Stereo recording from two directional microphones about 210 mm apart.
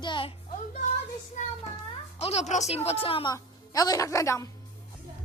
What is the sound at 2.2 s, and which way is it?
Speech, 30° left (ahead or behind).